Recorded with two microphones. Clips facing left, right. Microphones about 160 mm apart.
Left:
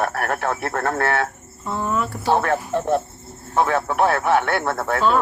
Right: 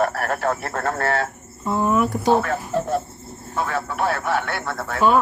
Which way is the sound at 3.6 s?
60° left (ahead or behind).